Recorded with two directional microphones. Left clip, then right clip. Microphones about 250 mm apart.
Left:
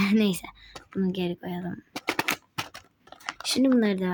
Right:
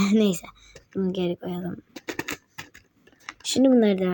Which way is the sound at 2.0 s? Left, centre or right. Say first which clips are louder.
Left 6 dB; centre.